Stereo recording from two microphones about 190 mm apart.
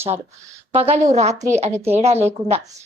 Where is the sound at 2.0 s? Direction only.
35° right (ahead or behind).